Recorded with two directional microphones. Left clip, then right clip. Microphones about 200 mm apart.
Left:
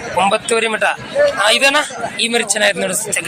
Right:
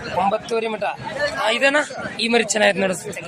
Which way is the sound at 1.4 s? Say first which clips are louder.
Left 1 dB; 10° right (ahead or behind).